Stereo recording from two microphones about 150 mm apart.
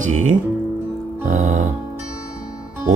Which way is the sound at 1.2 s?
50° right (ahead or behind).